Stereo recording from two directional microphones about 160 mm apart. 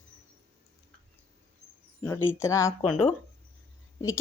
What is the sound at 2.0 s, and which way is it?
Speech, 15° left (ahead or behind).